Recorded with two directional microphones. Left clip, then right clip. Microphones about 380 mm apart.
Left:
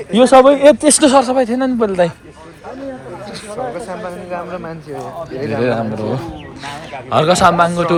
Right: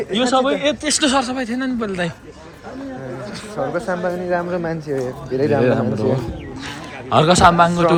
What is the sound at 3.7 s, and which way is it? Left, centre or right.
A man's voice, right.